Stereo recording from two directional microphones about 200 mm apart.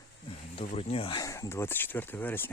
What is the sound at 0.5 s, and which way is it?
Speech, 30° left (ahead or behind).